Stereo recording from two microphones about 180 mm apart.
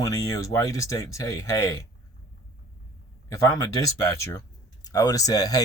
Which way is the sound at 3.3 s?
20° left (ahead or behind).